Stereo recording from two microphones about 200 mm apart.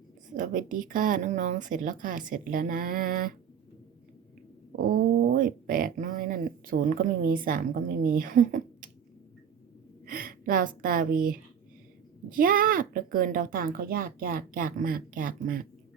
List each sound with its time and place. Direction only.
0.3 s a woman's voice: 40° right (ahead or behind)
4.8 s speech: 45° right (ahead or behind)
10.1 s a woman's voice: 45° right (ahead or behind)